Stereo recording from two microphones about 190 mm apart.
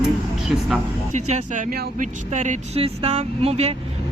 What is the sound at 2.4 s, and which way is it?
Speech, 35° right (ahead or behind).